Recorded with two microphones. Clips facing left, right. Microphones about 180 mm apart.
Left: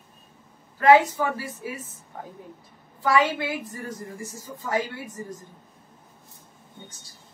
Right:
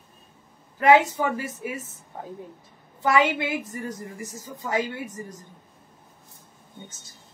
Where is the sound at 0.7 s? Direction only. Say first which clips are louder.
Left 1 dB; 20° right (ahead or behind).